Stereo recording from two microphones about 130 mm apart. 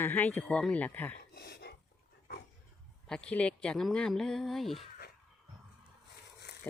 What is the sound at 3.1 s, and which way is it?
Speech, 5° left (ahead or behind).